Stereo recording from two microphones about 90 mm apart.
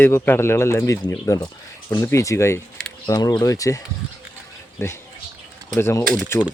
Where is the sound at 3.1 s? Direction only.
45° left (ahead or behind).